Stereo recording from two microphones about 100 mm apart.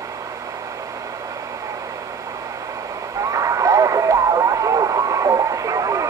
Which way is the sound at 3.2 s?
35° right (ahead or behind).